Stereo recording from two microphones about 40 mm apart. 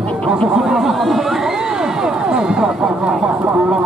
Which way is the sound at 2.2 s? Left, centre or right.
Centre.